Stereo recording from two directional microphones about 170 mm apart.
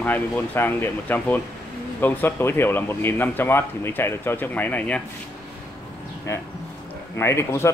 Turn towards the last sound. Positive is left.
turn(degrees=15)  # may be behind; listen again after turning